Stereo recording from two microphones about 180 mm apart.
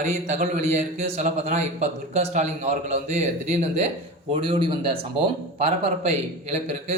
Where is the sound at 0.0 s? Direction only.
40° right (ahead or behind).